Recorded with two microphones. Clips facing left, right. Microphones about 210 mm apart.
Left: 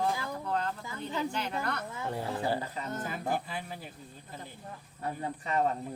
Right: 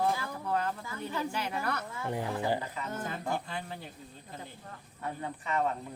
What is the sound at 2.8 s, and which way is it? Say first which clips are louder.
Speech: left 1 dB; 35° left (ahead or behind).